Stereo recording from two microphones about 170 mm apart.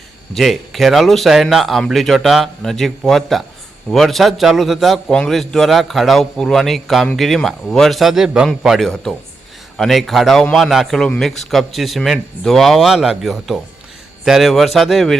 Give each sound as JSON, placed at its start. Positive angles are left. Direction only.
{"t": 0.3, "sound": "a man's voice", "side_deg": 0}